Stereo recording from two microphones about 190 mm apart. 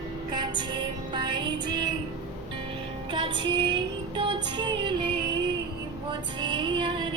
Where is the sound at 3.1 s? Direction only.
25° right (ahead or behind).